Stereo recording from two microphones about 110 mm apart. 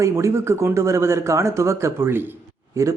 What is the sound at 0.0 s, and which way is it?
Speech, 25° right (ahead or behind).